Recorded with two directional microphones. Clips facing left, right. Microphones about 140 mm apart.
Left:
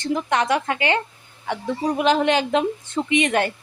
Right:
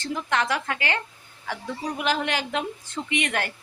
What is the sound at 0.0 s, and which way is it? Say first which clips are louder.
A woman's voice: left 5 dB; 20° left (ahead or behind).